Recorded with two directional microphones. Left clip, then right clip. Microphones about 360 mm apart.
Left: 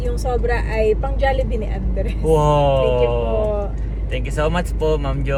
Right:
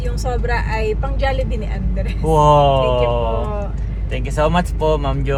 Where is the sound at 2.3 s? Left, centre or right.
Centre.